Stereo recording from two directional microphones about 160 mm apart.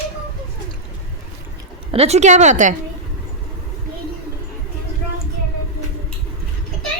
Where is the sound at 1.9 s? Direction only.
40° right (ahead or behind).